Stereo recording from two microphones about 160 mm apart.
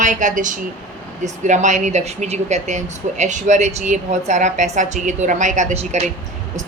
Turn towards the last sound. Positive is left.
turn(degrees=-45)  # may be behind; listen again after turning